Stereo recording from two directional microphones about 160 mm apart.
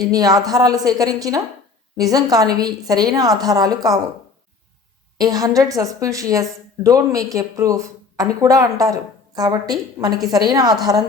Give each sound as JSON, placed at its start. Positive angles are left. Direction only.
{"t": 0.0, "sound": "a woman's voice", "side_deg": -25}
{"t": 5.1, "sound": "a woman's voice", "side_deg": -25}